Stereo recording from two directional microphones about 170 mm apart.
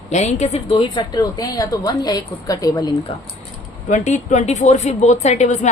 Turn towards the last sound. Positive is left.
turn(degrees=40)  # may be behind; listen again after turning